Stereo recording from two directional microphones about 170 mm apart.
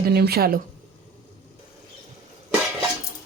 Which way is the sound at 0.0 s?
70° right (ahead or behind).